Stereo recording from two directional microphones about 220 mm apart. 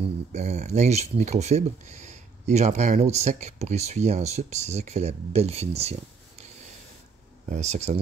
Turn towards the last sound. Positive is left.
turn(degrees=-30)  # may be behind; listen again after turning